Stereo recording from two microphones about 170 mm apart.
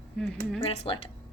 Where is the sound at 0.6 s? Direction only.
30° left (ahead or behind).